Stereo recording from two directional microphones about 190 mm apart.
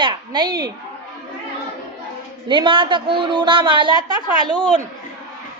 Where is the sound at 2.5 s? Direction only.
25° right (ahead or behind).